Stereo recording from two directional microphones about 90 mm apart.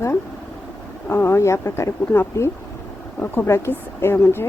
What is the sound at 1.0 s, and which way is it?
Speech, 30° left (ahead or behind).